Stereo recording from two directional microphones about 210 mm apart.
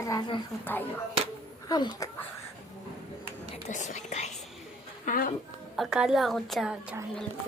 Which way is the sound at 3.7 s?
35° left (ahead or behind).